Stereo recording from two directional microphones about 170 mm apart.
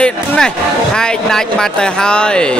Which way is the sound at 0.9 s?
5° left (ahead or behind).